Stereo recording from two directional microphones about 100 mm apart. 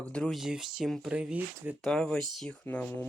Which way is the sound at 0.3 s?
5° right (ahead or behind).